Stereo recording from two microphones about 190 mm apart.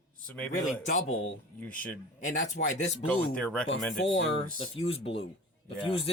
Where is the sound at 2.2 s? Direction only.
40° left (ahead or behind).